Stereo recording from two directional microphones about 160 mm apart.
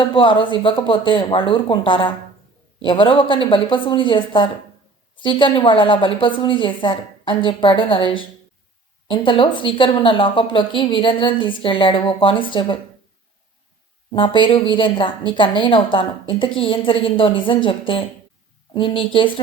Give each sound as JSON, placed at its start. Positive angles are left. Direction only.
{"t": 0.0, "sound": "a woman's voice", "side_deg": 30}
{"t": 14.1, "sound": "a woman's voice", "side_deg": 30}